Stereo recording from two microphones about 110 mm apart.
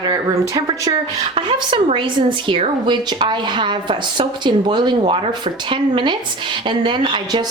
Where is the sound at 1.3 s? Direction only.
55° right (ahead or behind).